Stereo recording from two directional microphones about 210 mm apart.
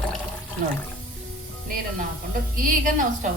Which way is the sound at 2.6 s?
40° right (ahead or behind).